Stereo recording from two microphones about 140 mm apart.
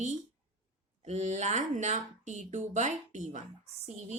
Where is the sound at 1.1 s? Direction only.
55° right (ahead or behind).